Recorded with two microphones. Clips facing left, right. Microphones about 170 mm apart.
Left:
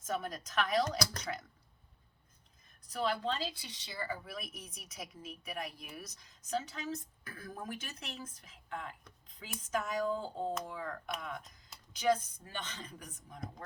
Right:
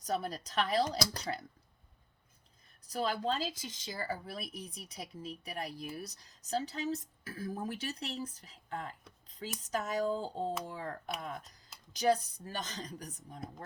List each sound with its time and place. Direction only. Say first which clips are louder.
0.0 s a woman's voice: right 2 dB; 35° right (ahead or behind)
2.8 s a woman's voice: right 1 dB; 40° right (ahead or behind)